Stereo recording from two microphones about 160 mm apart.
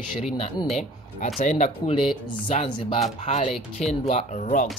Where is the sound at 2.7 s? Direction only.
35° left (ahead or behind).